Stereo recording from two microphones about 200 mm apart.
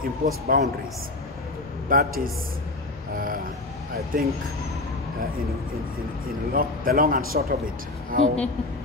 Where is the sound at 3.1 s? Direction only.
45° right (ahead or behind).